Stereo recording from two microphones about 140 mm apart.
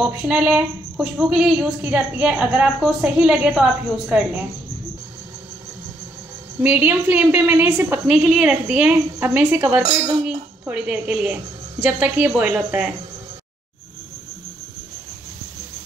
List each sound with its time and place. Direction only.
0.0 s a woman's voice: 5° right (ahead or behind)
6.6 s a woman's voice: 10° right (ahead or behind)